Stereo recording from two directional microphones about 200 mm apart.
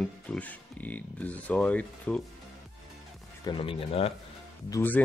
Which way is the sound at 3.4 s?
25° left (ahead or behind).